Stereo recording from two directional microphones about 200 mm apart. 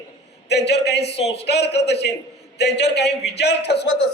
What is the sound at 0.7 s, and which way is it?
A man's voice, 55° left (ahead or behind).